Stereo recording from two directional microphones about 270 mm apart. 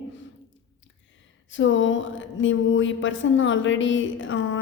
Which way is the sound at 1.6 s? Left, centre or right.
Left.